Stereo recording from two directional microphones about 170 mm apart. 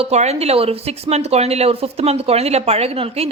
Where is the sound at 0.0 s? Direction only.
40° right (ahead or behind).